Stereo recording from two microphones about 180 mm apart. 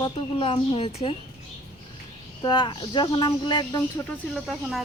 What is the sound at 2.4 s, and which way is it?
Speech, 25° left (ahead or behind).